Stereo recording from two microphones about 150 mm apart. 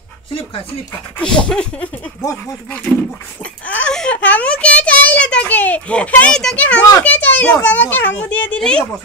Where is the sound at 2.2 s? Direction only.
20° left (ahead or behind).